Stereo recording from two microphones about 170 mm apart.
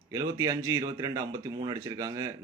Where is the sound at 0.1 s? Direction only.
20° right (ahead or behind).